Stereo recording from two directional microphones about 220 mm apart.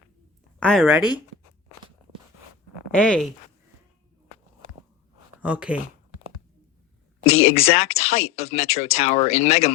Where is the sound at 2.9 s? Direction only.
5° left (ahead or behind).